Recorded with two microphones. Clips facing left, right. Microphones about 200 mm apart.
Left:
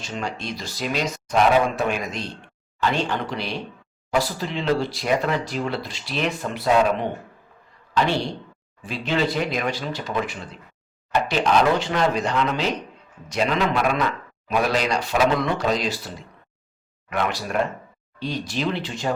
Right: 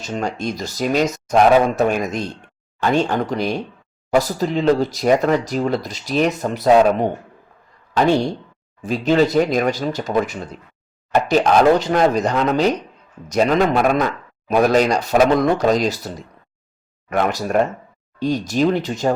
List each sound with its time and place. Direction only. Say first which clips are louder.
0.0 s speech: right 6 dB; 45° right (ahead or behind)